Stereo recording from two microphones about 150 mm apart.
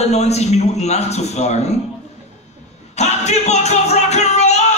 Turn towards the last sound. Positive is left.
turn(degrees=50)  # may be behind; listen again after turning